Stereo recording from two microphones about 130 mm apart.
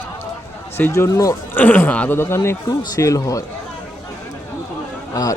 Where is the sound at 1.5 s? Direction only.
15° left (ahead or behind).